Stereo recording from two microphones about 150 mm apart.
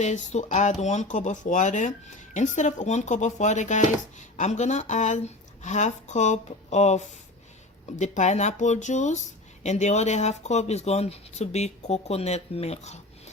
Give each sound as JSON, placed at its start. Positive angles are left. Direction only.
{"t": 0.0, "sound": "speech", "side_deg": 50}